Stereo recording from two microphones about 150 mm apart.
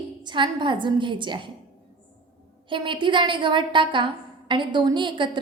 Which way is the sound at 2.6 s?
35° right (ahead or behind).